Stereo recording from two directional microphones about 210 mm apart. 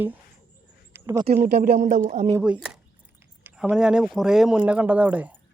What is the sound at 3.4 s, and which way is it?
Speech, 5° right (ahead or behind).